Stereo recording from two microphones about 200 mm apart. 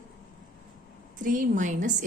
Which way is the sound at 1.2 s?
40° right (ahead or behind).